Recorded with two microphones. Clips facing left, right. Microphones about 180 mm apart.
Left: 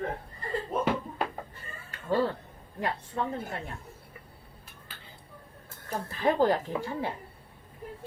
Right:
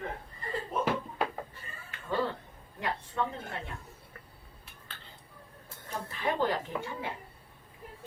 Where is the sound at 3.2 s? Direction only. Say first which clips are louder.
Even; 40° left (ahead or behind).